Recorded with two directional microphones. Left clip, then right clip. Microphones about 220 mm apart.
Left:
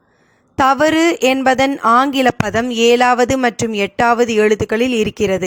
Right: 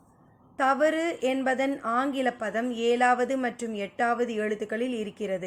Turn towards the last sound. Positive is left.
turn(degrees=45)  # may be behind; listen again after turning